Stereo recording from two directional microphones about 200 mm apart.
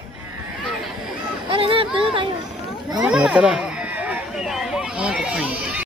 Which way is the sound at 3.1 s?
5° right (ahead or behind).